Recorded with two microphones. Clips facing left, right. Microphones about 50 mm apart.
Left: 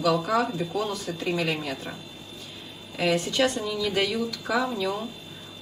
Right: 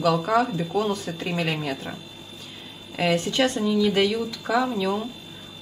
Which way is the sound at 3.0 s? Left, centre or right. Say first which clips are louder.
Right 2 dB; right.